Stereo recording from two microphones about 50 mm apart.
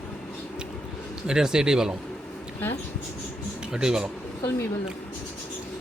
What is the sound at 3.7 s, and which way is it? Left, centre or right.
Speech, centre.